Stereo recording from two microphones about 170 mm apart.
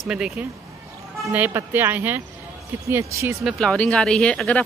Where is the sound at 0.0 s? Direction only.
5° right (ahead or behind).